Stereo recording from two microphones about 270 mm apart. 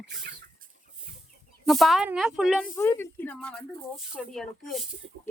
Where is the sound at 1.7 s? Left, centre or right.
Centre.